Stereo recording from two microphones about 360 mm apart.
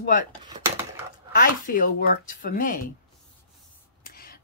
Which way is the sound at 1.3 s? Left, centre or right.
Left.